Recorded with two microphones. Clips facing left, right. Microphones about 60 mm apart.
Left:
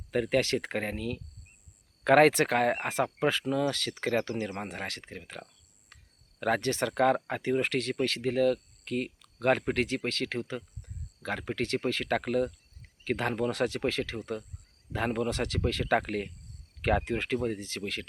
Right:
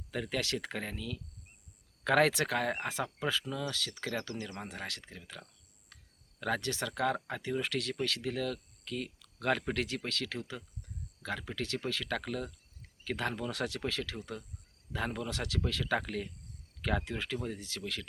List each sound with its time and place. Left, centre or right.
0.1 s speech: left